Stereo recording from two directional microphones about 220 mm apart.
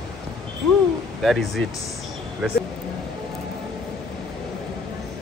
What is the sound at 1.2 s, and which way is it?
Speech, centre (ahead or behind).